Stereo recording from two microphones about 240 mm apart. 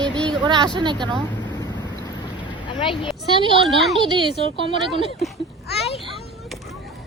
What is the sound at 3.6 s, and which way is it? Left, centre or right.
Speech, centre.